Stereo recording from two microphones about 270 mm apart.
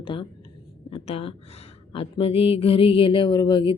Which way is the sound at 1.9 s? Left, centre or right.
Left.